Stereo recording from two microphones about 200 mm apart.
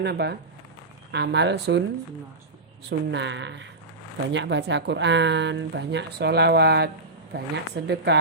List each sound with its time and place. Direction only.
0.0 s a woman's voice: 55° right (ahead or behind)
3.1 s a woman's voice: 60° right (ahead or behind)